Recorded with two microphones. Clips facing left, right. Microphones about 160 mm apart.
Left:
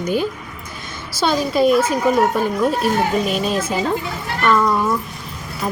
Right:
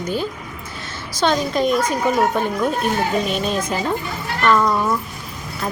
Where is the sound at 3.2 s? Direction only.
5° left (ahead or behind).